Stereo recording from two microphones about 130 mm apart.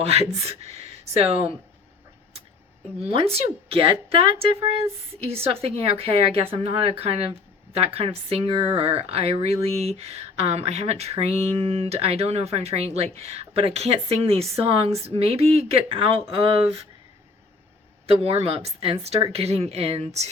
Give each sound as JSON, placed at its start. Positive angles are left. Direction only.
{"t": 0.0, "sound": "speech", "side_deg": -50}
{"t": 3.2, "sound": "speech", "side_deg": -50}
{"t": 18.0, "sound": "speech", "side_deg": -50}